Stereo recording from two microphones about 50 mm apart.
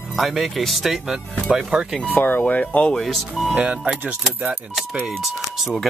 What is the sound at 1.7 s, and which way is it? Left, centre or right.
Speech, right.